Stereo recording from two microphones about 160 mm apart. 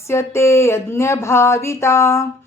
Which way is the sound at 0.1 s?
15° left (ahead or behind).